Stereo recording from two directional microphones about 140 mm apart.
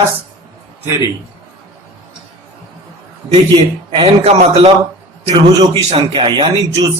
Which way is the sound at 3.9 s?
40° right (ahead or behind).